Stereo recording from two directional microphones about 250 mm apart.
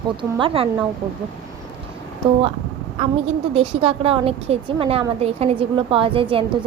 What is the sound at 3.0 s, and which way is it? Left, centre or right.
A woman's voice, right.